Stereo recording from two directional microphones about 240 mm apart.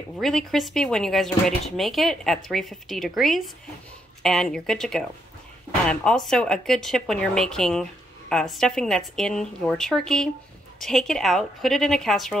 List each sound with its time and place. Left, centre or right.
0.2 s a woman's voice: centre